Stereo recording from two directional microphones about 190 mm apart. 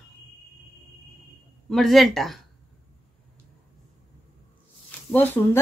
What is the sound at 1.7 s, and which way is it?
Speech, centre (ahead or behind).